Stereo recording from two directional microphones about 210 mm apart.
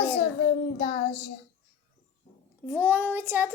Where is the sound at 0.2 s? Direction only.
30° left (ahead or behind).